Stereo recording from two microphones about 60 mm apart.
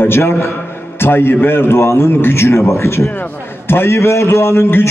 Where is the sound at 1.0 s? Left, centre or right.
Left.